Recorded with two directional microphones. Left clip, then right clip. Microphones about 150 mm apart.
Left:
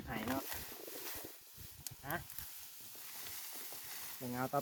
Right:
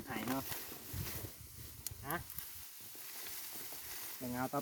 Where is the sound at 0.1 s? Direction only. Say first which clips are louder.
Even; 25° right (ahead or behind).